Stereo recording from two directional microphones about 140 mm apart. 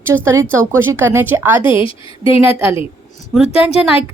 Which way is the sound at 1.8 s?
40° left (ahead or behind).